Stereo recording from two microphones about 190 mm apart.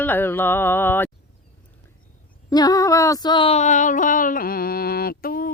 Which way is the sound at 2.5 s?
20° left (ahead or behind).